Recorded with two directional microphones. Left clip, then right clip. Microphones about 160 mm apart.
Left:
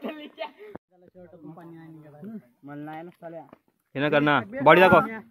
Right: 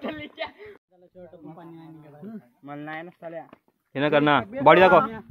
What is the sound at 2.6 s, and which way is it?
Speech, 20° right (ahead or behind).